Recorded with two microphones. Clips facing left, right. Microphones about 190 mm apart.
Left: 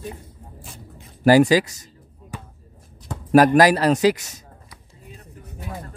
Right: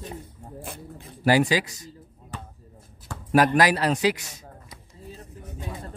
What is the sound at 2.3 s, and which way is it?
Basketball bounce, 10° left (ahead or behind).